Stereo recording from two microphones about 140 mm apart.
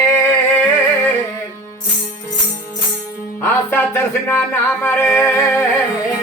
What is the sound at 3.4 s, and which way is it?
Music, 15° left (ahead or behind).